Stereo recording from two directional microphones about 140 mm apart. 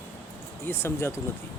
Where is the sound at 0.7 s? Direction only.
20° left (ahead or behind).